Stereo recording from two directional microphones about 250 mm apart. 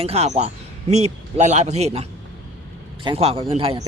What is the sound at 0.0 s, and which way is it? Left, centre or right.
A man's voice, right.